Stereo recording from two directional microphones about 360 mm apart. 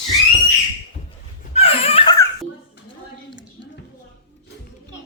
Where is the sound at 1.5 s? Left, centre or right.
Centre.